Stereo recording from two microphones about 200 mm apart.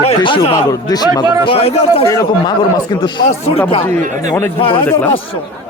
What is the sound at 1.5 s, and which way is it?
Speech, 30° left (ahead or behind).